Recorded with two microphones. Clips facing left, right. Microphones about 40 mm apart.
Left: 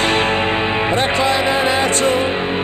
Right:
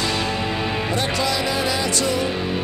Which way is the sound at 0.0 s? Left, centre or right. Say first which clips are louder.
Left 7 dB; left.